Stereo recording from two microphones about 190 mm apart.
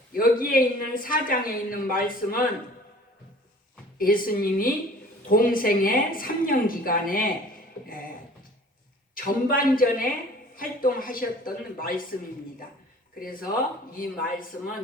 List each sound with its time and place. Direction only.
0.1 s speech: 50° left (ahead or behind)
3.9 s speech: 50° left (ahead or behind)
9.1 s speech: 50° left (ahead or behind)
13.1 s speech: 50° left (ahead or behind)